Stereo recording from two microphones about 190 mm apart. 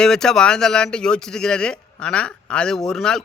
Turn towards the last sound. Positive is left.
turn(degrees=5)  # may be behind; listen again after turning